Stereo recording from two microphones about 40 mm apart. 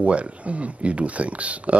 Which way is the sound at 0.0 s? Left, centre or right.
Right.